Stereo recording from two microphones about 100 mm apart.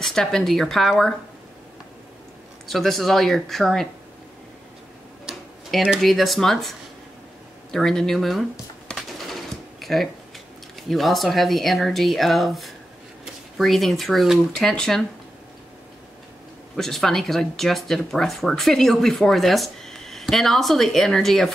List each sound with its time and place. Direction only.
0.0 s speech: 5° left (ahead or behind)
2.7 s speech: centre (ahead or behind)
5.2 s speech: 5° right (ahead or behind)
7.7 s a sound: 5° left (ahead or behind)
10.8 s speech: centre (ahead or behind)
16.7 s speech: 5° left (ahead or behind)